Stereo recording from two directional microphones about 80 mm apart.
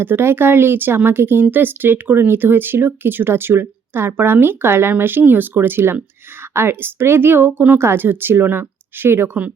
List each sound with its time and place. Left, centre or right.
0.0 s speech: right